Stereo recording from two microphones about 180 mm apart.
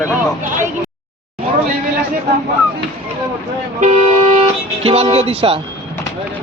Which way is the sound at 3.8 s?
35° right (ahead or behind).